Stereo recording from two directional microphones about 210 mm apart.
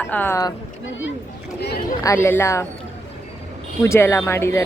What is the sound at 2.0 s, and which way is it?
Speech, 15° left (ahead or behind).